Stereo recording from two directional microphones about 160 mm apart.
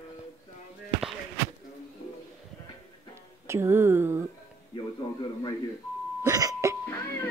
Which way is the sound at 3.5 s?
15° right (ahead or behind).